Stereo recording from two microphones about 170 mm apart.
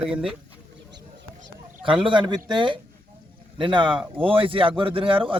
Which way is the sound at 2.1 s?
25° right (ahead or behind).